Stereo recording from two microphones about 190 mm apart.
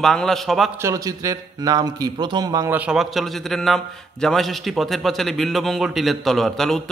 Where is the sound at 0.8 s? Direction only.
15° right (ahead or behind).